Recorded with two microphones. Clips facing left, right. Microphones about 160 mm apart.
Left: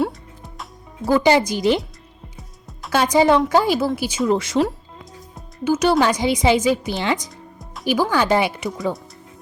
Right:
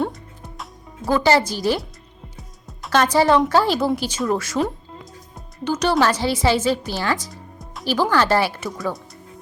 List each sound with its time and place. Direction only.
0.0 s music: centre (ahead or behind)
1.0 s speech: 15° left (ahead or behind)
2.6 s music: centre (ahead or behind)
3.0 s speech: 15° left (ahead or behind)
5.3 s speech: 5° left (ahead or behind)